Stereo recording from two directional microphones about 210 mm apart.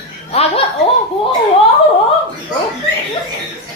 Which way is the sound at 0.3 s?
30° left (ahead or behind).